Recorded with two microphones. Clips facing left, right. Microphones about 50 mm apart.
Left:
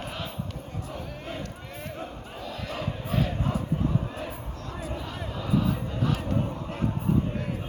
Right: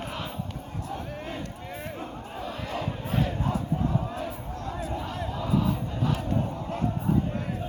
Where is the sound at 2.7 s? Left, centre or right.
Centre.